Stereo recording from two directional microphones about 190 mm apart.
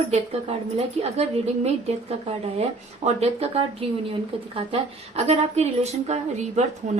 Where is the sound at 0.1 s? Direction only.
35° right (ahead or behind).